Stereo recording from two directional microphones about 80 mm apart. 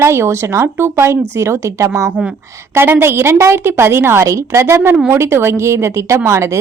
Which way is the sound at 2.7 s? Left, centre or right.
Right.